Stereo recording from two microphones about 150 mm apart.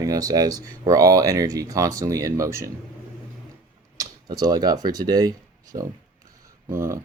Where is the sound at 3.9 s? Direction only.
25° right (ahead or behind).